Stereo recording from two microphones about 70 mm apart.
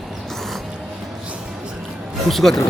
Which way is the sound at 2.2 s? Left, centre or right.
Centre.